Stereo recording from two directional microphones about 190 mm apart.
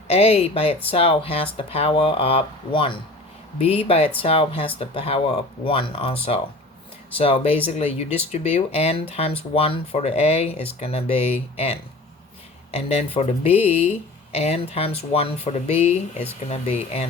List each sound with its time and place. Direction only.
0.1 s speech: 30° left (ahead or behind)